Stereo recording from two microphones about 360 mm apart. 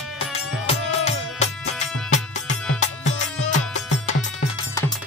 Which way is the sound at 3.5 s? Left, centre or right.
Left.